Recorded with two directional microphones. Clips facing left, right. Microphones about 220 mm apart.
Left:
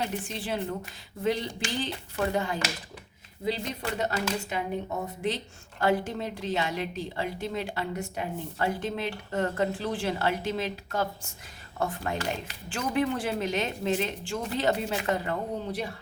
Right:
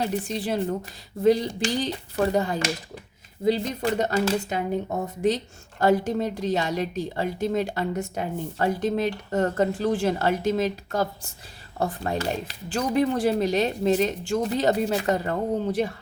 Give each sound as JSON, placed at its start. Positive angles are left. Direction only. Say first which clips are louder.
{"t": 0.0, "sound": "a woman's voice", "louder": "right 6 dB", "side_deg": -35}
{"t": 5.8, "sound": "a woman's voice", "louder": "right 5 dB", "side_deg": -40}